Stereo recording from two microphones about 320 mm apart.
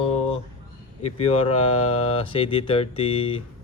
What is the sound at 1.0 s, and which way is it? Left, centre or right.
Speech, centre.